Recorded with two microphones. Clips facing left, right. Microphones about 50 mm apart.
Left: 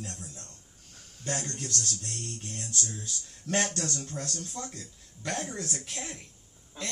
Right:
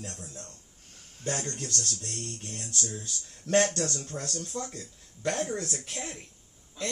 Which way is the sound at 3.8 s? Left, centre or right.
Centre.